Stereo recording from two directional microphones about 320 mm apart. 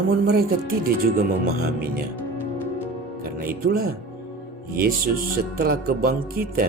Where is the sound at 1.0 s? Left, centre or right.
Right.